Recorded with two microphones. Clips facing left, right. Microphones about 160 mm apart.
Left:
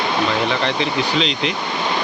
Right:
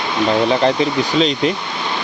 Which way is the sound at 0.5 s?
35° right (ahead or behind).